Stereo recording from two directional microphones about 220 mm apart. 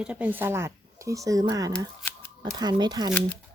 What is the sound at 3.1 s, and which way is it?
Speech, 5° left (ahead or behind).